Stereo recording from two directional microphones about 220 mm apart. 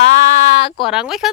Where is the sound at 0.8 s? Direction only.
Centre (ahead or behind).